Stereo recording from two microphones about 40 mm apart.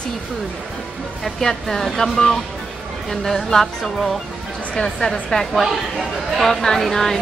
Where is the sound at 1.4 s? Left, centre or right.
Centre.